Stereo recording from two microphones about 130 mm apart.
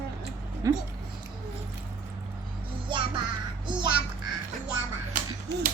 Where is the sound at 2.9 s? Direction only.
40° right (ahead or behind).